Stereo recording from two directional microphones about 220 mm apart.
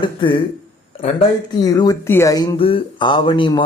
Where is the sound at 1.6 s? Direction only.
15° left (ahead or behind).